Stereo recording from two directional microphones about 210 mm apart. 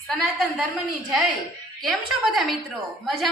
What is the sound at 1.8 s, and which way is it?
Child singing, centre (ahead or behind).